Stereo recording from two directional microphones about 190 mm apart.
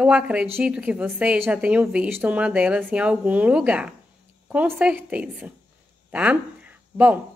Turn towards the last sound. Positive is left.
turn(degrees=-10)  # may be behind; listen again after turning